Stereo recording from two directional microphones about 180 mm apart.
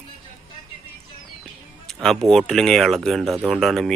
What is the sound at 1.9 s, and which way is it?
Speech, centre (ahead or behind).